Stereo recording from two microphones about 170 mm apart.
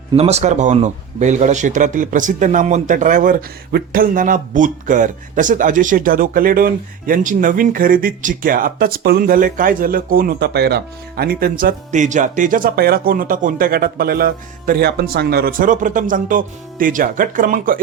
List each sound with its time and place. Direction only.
0.1 s a man's voice: 40° right (ahead or behind)